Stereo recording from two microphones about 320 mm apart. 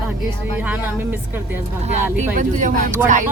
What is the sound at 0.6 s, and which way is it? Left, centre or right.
Speech, centre.